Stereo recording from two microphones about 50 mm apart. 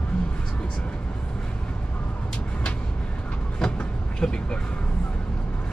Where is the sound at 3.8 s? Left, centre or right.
Centre.